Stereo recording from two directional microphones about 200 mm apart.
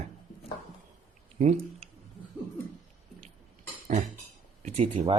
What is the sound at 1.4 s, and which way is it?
Speech, 35° right (ahead or behind).